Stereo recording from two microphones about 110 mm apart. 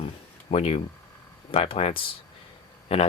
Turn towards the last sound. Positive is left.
turn(degrees=70)  # may be behind; listen again after turning